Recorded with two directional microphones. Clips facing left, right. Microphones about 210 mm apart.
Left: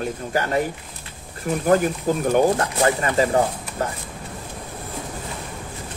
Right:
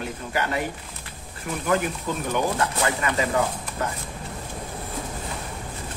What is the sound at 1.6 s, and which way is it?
Speech, 40° left (ahead or behind).